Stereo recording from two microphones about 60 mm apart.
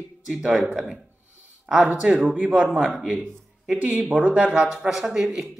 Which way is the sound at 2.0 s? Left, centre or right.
Centre.